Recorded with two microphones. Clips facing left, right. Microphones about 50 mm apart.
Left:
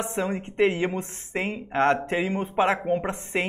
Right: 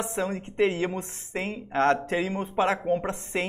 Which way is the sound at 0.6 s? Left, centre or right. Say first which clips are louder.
Left 2 dB; left.